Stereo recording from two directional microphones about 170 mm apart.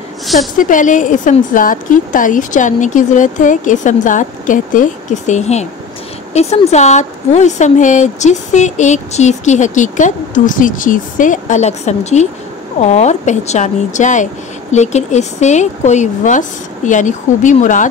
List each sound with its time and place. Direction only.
0.6 s speech: 50° left (ahead or behind)